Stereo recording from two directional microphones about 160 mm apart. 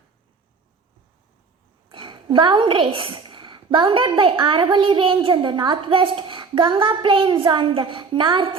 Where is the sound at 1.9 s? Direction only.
30° right (ahead or behind).